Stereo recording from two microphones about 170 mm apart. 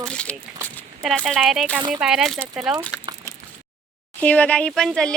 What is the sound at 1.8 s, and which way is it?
Speech, 25° right (ahead or behind).